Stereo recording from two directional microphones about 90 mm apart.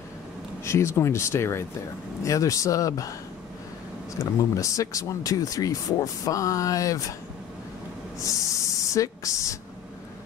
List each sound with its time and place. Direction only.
0.7 s speech: 30° left (ahead or behind)
4.2 s speech: 40° left (ahead or behind)
8.2 s a sound: 35° left (ahead or behind)